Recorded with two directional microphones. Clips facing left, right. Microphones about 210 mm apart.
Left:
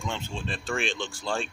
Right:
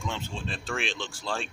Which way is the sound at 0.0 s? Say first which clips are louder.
Left 1 dB; centre (ahead or behind).